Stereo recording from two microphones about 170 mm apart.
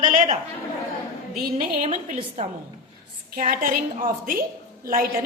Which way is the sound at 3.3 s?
55° right (ahead or behind).